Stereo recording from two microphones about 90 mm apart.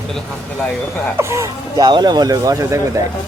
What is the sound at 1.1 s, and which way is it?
Speech, 30° right (ahead or behind).